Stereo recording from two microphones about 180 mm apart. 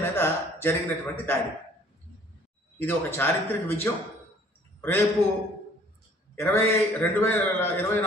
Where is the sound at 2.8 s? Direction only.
10° left (ahead or behind).